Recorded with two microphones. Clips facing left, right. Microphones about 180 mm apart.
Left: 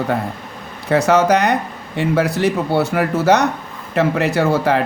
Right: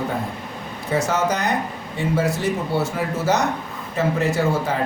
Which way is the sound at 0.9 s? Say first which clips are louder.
Left 7 dB; 70° left (ahead or behind).